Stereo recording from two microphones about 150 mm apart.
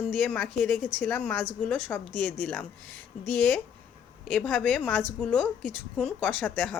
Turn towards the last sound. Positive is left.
turn(degrees=10)  # may be behind; listen again after turning